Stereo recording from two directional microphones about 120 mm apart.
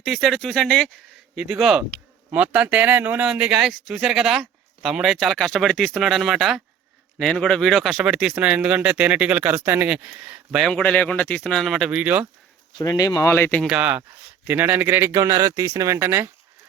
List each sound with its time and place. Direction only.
0.0 s speech: centre (ahead or behind)
1.4 s speech: 5° right (ahead or behind)
10.6 s speech: 5° left (ahead or behind); by 12.2 s 10° right (ahead or behind)
12.7 s speech: 30° left (ahead or behind)
13.6 s speech: 5° right (ahead or behind)